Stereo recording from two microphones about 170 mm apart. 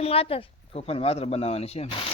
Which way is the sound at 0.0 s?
35° left (ahead or behind).